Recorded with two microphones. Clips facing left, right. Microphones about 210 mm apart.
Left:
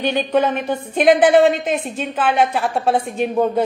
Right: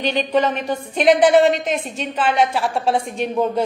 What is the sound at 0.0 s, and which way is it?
A woman's voice, 5° left (ahead or behind).